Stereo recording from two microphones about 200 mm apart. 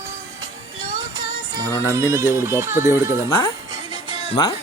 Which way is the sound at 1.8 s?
15° right (ahead or behind).